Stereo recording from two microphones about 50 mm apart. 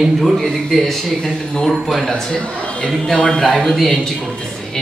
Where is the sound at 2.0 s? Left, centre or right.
Centre.